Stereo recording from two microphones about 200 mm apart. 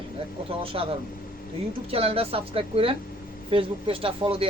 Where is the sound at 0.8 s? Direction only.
30° right (ahead or behind).